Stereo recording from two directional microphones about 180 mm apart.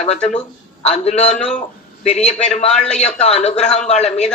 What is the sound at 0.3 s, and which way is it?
Speech, 40° left (ahead or behind).